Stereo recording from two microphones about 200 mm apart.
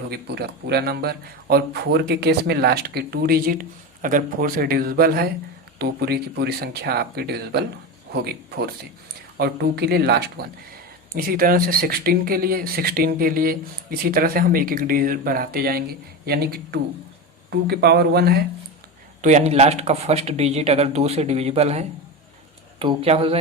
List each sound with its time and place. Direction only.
0.1 s speech: 55° right (ahead or behind)
19.2 s speech: 35° right (ahead or behind)